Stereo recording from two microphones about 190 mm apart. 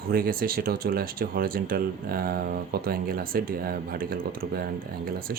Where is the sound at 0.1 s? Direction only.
50° right (ahead or behind).